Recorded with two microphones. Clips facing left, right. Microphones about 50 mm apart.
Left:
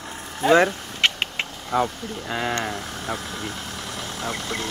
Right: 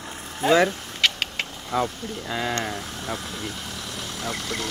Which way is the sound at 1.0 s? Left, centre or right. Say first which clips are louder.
Left 1 dB; left.